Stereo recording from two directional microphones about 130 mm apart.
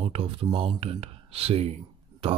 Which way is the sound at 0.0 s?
45° right (ahead or behind).